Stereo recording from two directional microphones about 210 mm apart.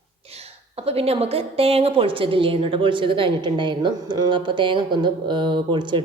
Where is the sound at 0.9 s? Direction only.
30° right (ahead or behind).